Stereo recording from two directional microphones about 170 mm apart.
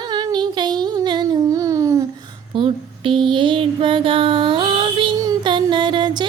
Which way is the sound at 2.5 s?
30° right (ahead or behind).